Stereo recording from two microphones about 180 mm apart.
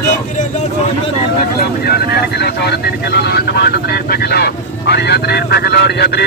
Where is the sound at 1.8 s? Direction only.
60° left (ahead or behind).